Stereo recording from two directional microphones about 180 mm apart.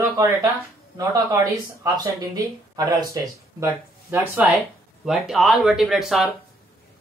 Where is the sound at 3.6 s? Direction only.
10° right (ahead or behind).